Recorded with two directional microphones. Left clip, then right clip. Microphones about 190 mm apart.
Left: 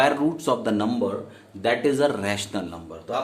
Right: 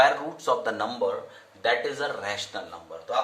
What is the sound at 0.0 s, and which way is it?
Speech, 30° left (ahead or behind).